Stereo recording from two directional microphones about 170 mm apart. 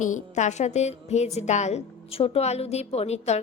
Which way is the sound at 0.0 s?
45° left (ahead or behind).